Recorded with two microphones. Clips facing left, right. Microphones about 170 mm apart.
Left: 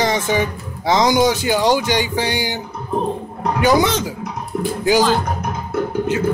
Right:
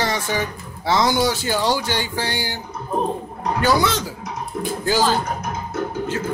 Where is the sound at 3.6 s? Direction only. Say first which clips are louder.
Left 4 dB; 20° left (ahead or behind).